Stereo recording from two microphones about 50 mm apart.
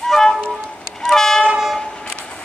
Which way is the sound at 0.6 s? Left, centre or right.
Centre.